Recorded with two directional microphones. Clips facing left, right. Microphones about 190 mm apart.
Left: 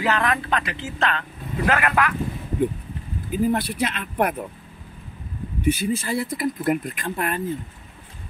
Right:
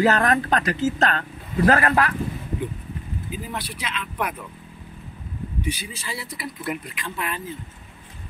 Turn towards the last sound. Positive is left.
turn(degrees=50)  # may be behind; listen again after turning